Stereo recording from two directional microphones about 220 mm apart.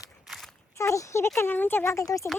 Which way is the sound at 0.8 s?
15° left (ahead or behind).